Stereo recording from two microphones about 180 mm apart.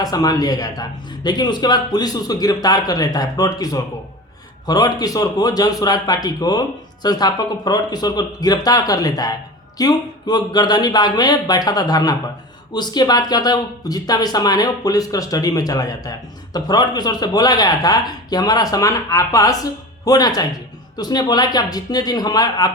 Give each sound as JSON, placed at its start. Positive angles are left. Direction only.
{"t": 0.0, "sound": "speech", "side_deg": 20}